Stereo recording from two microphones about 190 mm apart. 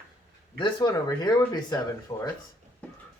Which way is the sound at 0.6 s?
25° left (ahead or behind).